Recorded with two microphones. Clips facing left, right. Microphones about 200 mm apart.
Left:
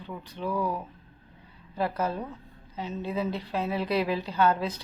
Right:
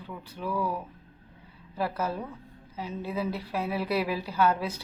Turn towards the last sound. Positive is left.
turn(degrees=-10)  # may be behind; listen again after turning